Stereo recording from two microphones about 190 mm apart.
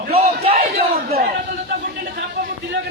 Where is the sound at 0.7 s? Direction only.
50° right (ahead or behind).